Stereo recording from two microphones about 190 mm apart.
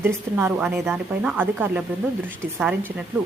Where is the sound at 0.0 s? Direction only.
10° right (ahead or behind).